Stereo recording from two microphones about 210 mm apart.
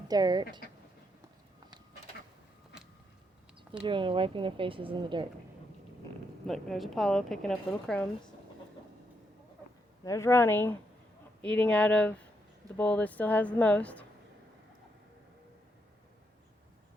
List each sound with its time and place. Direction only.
0.1 s a woman's voice: 20° right (ahead or behind)
3.8 s a woman's voice: 25° right (ahead or behind)
6.5 s speech: centre (ahead or behind)
10.0 s speech: 15° left (ahead or behind)